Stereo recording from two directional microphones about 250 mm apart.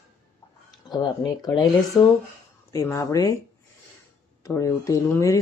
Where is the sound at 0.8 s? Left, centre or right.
Centre.